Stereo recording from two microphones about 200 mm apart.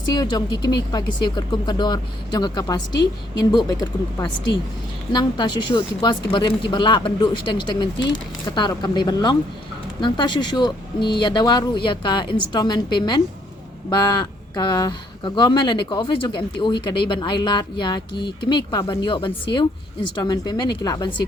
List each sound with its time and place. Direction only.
0.1 s speech: 20° left (ahead or behind)